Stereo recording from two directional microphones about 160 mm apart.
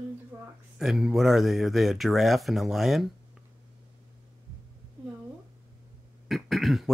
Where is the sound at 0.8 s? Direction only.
Centre (ahead or behind).